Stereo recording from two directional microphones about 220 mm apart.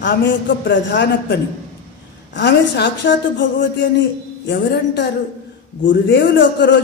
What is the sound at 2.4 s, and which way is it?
A man's voice, 50° left (ahead or behind).